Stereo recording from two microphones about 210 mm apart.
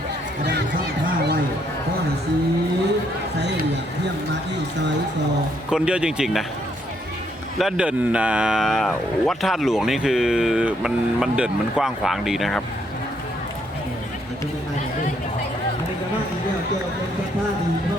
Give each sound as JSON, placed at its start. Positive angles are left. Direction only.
{"t": 3.3, "sound": "a sound", "side_deg": -55}
{"t": 5.7, "sound": "speech", "side_deg": -5}
{"t": 7.6, "sound": "speech", "side_deg": -5}